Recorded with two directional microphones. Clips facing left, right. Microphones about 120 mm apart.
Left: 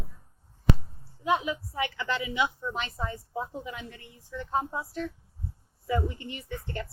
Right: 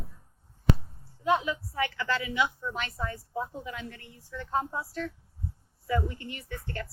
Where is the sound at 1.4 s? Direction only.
20° left (ahead or behind).